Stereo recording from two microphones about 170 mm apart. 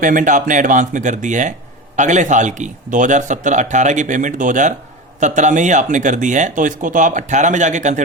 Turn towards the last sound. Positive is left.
turn(degrees=-45)  # may be behind; listen again after turning